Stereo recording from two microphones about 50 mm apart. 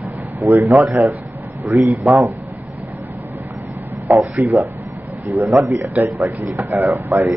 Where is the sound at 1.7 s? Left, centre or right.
Right.